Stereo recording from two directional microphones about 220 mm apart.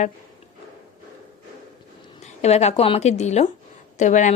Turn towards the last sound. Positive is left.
turn(degrees=35)  # may be behind; listen again after turning